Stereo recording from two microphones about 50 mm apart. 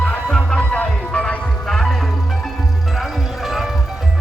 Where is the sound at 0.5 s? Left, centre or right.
Left.